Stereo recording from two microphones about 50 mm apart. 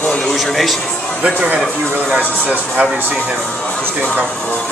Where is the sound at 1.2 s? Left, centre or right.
Right.